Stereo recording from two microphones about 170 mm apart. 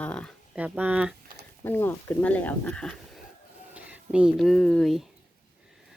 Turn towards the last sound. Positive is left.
turn(degrees=5)  # may be behind; listen again after turning